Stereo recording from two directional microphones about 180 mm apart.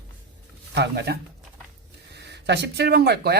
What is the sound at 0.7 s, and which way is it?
Speech, 65° right (ahead or behind).